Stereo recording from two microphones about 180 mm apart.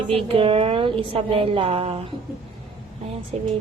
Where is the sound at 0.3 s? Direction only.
30° right (ahead or behind).